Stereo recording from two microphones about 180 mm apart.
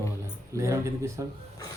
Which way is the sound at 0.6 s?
15° right (ahead or behind).